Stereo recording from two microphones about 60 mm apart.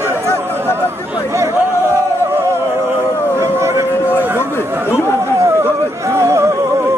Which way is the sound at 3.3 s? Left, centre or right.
Right.